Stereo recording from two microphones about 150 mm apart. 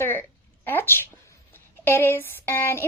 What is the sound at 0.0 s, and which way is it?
A woman's voice, 15° left (ahead or behind).